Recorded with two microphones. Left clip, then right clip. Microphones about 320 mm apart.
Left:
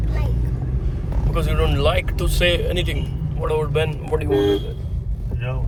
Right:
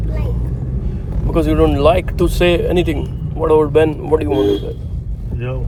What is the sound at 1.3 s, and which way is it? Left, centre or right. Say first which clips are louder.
Speech: right 9 dB; right.